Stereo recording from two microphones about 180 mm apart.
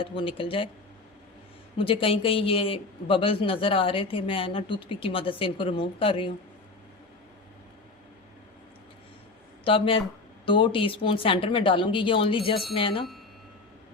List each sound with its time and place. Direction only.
0.0 s a man's voice: 30° left (ahead or behind)
1.8 s a man's voice: 30° left (ahead or behind)
9.6 s a man's voice: 30° left (ahead or behind)